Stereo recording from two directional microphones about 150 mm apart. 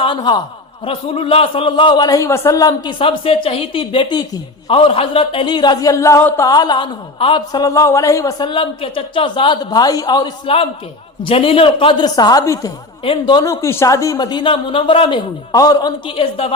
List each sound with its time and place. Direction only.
0.0 s a man's voice: 35° left (ahead or behind)
15.5 s a man's voice: 25° left (ahead or behind)